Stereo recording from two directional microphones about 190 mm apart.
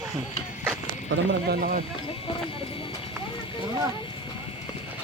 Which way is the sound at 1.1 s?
65° right (ahead or behind).